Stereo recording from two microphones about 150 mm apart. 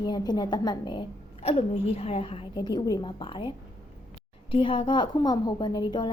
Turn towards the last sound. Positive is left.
turn(degrees=30)  # may be behind; listen again after turning